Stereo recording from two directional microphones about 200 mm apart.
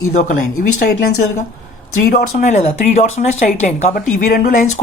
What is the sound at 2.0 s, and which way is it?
Speech, 45° left (ahead or behind).